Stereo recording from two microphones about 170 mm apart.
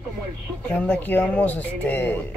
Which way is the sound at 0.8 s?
10° left (ahead or behind).